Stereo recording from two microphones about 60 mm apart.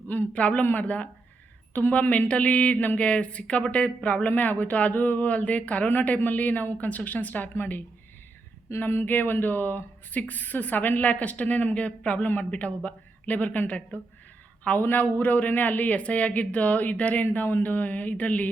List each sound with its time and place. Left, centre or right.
0.3 s speech: left
8.7 s speech: left
9.0 s speech: left